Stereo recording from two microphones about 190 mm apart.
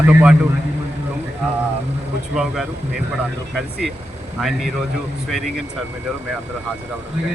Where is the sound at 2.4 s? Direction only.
Centre (ahead or behind).